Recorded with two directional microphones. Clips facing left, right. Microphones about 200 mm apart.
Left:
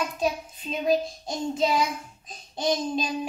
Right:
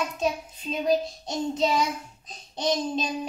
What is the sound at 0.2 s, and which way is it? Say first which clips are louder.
A woman's voice: even; 5° left (ahead or behind).